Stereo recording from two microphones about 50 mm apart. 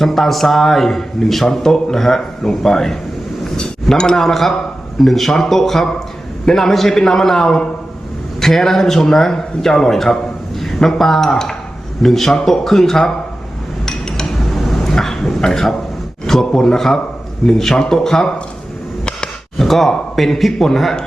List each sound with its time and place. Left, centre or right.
0.0 s a man's voice: centre
13.8 s dishes: centre
16.2 s a sound: centre
16.5 s a man's voice: centre
19.5 s a man's voice: centre